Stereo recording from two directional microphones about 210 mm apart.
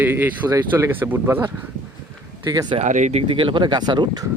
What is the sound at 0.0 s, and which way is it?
Speech, 10° right (ahead or behind).